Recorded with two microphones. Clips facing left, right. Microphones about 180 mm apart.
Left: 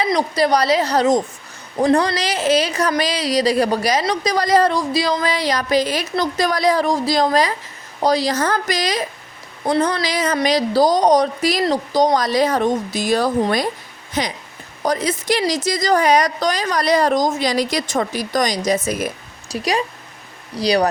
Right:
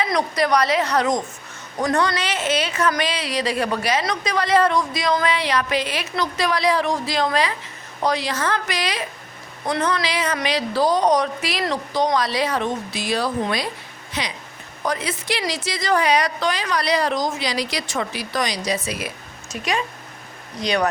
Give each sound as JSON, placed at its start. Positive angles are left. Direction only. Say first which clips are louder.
{"t": 0.0, "sound": "a woman's voice", "louder": "left 3 dB", "side_deg": 30}